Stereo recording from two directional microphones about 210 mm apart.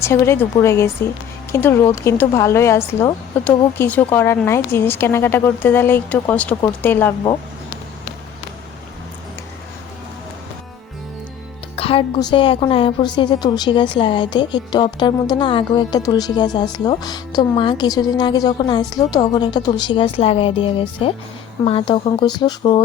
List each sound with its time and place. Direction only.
0.0 s a woman's voice: 10° left (ahead or behind)
11.8 s a woman's voice: 25° left (ahead or behind)